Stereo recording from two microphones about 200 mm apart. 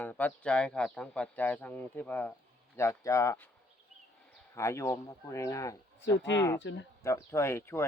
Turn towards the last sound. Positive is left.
turn(degrees=15)  # may be behind; listen again after turning